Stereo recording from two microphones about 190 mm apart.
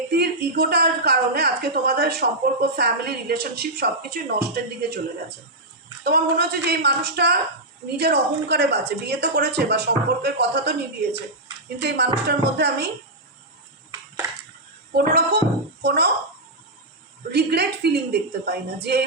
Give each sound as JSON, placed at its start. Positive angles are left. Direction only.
{"t": 0.1, "sound": "a woman's voice", "side_deg": -55}
{"t": 6.0, "sound": "a woman's voice", "side_deg": -55}
{"t": 14.9, "sound": "a woman's voice", "side_deg": -55}
{"t": 17.3, "sound": "a woman's voice", "side_deg": -60}